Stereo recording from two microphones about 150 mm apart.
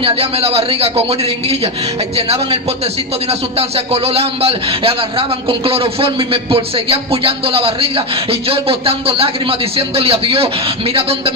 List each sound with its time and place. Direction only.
0.0 s a man's voice: 40° right (ahead or behind)